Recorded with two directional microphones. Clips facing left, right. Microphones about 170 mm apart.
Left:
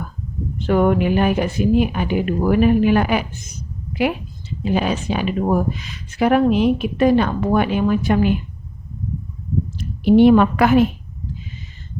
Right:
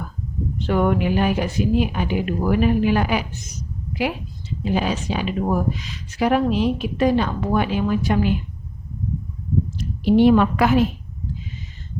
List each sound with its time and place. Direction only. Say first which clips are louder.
0.6 s a woman's voice: left 3 dB; 50° left (ahead or behind)
9.7 s a woman's voice: left 4 dB; 55° left (ahead or behind)